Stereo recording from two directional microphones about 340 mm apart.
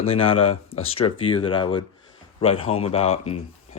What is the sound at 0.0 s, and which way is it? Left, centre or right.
Speech, centre.